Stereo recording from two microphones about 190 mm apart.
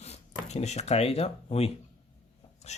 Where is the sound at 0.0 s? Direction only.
35° left (ahead or behind).